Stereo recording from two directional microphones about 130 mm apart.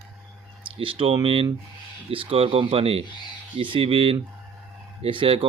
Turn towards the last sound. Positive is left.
turn(degrees=-40)  # may be behind; listen again after turning